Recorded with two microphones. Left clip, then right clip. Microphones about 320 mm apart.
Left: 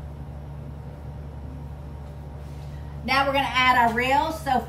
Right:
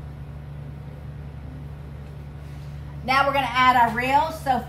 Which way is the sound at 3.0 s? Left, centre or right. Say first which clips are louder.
Right 2 dB; centre.